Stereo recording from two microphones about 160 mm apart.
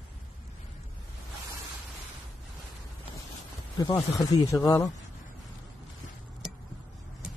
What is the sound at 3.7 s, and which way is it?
Speech, 20° left (ahead or behind).